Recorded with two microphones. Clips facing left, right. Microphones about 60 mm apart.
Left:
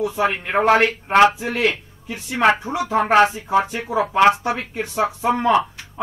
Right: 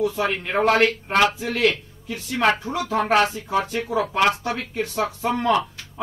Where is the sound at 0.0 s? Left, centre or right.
Centre.